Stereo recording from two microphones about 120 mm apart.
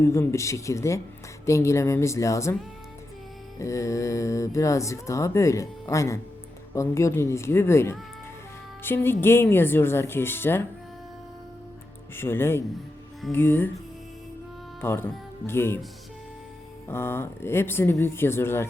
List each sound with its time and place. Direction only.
0.0 s speech: 25° left (ahead or behind)
3.6 s speech: 25° left (ahead or behind)
12.1 s speech: 20° left (ahead or behind)
14.8 s speech: 20° left (ahead or behind)
16.9 s speech: 20° left (ahead or behind)